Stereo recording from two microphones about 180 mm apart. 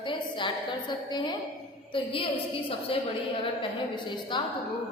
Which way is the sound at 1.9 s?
30° left (ahead or behind).